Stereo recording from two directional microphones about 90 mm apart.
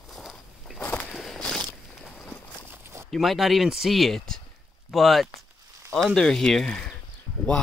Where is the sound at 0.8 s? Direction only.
20° left (ahead or behind).